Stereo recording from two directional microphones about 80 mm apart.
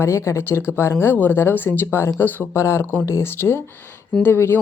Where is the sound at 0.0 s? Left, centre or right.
Left.